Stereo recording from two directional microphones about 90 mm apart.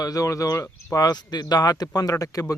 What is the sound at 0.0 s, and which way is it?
Speech, 40° left (ahead or behind).